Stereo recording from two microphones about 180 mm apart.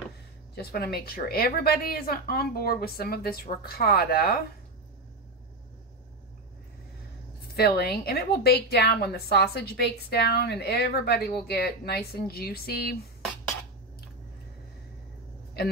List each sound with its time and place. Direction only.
0.6 s a woman's voice: 60° left (ahead or behind)
7.5 s a woman's voice: 60° left (ahead or behind)
15.6 s a man's voice: 60° left (ahead or behind)